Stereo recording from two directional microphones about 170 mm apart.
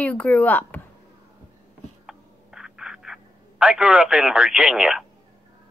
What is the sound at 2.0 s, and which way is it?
Telephone, 5° right (ahead or behind).